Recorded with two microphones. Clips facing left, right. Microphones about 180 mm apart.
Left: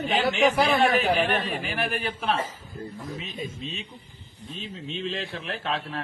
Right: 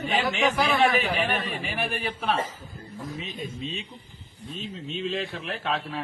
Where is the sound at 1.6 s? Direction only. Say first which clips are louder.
Left 1 dB; 5° right (ahead or behind).